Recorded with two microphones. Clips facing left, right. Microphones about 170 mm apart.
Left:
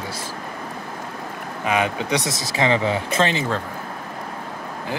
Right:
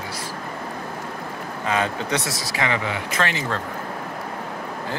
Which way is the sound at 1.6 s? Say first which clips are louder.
Left 2 dB; 15° left (ahead or behind).